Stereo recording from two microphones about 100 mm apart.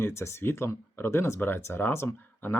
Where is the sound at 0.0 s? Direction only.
25° left (ahead or behind).